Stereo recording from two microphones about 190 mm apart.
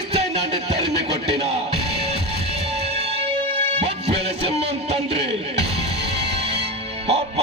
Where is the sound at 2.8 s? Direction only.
30° right (ahead or behind).